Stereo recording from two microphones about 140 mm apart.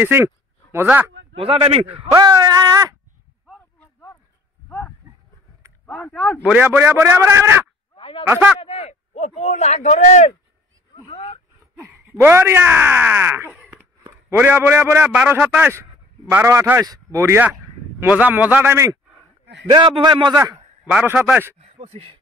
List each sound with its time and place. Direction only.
0.0 s speech: 15° right (ahead or behind)
1.3 s speech: 40° right (ahead or behind)
2.1 s a sound: 30° right (ahead or behind)
3.8 s a sound: 15° left (ahead or behind)
5.9 s speech: 15° left (ahead or behind)
6.4 s speech: 10° right (ahead or behind)
7.9 s a sound: 40° left (ahead or behind)
8.5 s speech: 45° left (ahead or behind)
12.1 s speech: 15° right (ahead or behind)
19.7 s a man's voice: 35° right (ahead or behind)
20.9 s speech: 15° right (ahead or behind)
21.5 s speech: 50° right (ahead or behind)